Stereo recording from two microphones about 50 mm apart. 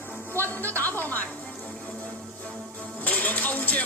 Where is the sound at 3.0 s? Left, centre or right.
Left.